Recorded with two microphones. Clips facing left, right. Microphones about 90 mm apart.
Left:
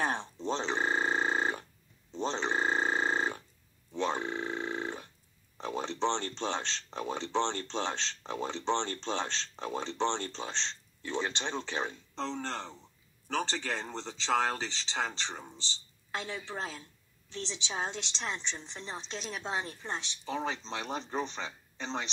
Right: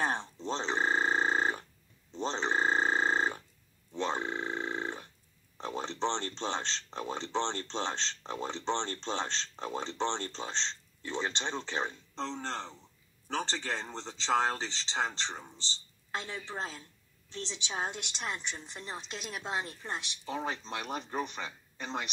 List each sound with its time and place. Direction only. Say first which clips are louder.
0.0 s a sound: even; centre (ahead or behind)
5.6 s speech: left 1 dB; centre (ahead or behind)
17.7 s a woman's voice: even; 10° right (ahead or behind)
21.8 s a woman's voice: left 1 dB; 25° left (ahead or behind)